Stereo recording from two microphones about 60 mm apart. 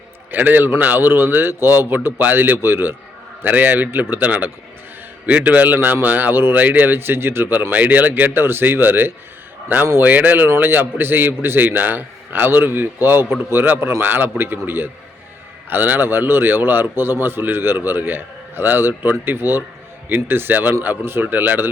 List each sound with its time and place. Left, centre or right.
0.3 s a man's voice: right
3.4 s a man's voice: right
7.7 s a man's voice: right